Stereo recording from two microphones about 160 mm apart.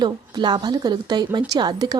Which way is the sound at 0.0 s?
30° right (ahead or behind).